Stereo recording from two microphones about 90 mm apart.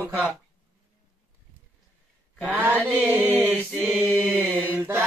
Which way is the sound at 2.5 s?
20° right (ahead or behind).